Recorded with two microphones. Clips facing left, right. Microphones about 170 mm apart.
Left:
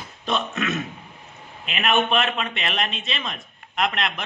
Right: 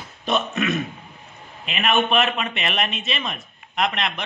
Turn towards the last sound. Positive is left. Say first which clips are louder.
# right 1 dB
turn(degrees=0)  # may be behind; listen again after turning